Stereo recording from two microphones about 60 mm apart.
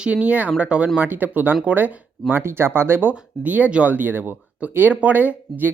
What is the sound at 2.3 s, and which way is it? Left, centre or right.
Speech, right.